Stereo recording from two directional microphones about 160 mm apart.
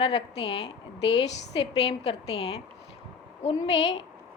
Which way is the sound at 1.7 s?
40° left (ahead or behind).